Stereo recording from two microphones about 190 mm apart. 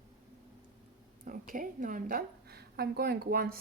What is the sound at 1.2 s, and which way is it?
Speech, 50° right (ahead or behind).